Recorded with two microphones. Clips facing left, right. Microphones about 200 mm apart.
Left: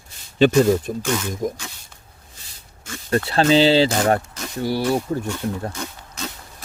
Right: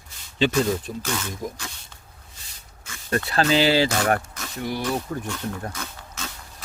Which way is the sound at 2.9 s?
30° left (ahead or behind).